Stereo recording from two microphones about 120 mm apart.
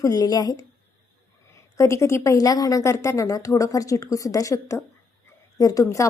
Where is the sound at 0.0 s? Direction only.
30° left (ahead or behind).